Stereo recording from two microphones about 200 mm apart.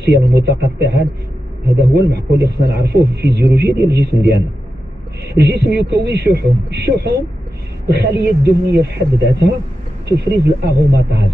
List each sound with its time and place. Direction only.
0.0 s a man's voice: 55° right (ahead or behind)